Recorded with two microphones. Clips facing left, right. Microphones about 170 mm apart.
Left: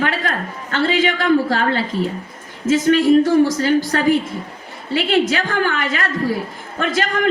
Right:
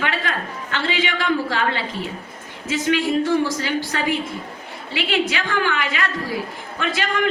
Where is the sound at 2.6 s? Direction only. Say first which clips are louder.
Left 7 dB; 45° left (ahead or behind).